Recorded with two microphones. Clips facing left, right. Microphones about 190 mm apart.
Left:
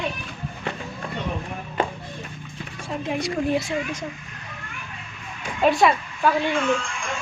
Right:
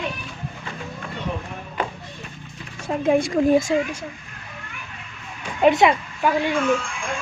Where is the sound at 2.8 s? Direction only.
45° right (ahead or behind).